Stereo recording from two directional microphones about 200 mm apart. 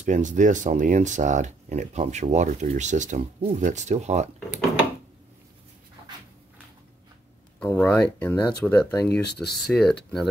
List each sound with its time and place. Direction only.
0.0 s speech: 40° right (ahead or behind)
7.6 s speech: 10° left (ahead or behind)
9.2 s speech: 55° left (ahead or behind)
9.7 s speech: centre (ahead or behind)